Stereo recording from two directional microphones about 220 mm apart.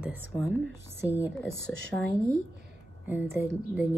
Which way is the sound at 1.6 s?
55° right (ahead or behind).